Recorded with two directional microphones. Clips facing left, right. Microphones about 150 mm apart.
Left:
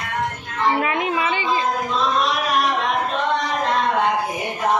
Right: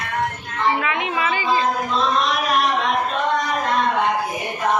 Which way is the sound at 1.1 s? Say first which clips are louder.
Even; 25° left (ahead or behind).